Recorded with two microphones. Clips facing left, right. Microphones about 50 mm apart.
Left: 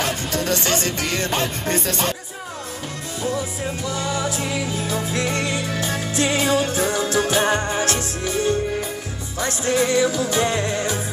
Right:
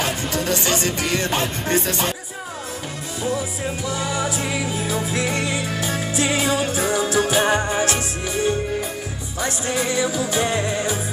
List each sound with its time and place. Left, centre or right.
0.0 s music: centre
3.2 s music: centre
9.4 s music: centre